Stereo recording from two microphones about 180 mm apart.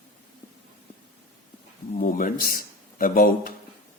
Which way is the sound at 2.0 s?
50° left (ahead or behind).